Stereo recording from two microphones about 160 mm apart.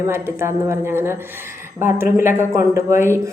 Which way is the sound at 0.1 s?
15° right (ahead or behind).